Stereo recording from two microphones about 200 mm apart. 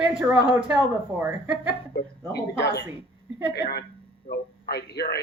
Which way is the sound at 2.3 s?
55° left (ahead or behind).